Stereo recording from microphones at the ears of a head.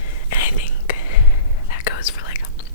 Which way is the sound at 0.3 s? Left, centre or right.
Left.